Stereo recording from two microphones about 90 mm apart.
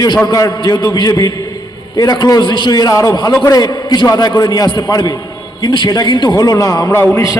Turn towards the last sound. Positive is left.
turn(degrees=25)  # may be behind; listen again after turning